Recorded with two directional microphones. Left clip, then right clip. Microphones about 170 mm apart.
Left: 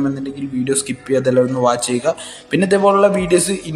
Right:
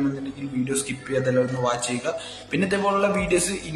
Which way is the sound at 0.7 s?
40° left (ahead or behind).